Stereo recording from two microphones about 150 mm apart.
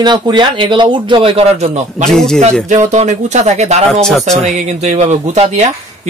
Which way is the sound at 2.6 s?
50° right (ahead or behind).